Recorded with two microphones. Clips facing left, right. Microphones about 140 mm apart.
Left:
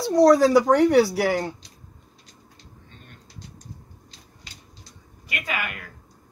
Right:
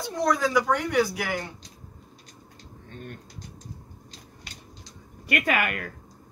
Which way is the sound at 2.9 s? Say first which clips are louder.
Right 12 dB; 50° right (ahead or behind).